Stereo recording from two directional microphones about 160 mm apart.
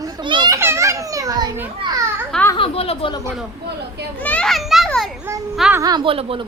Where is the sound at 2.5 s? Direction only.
35° left (ahead or behind).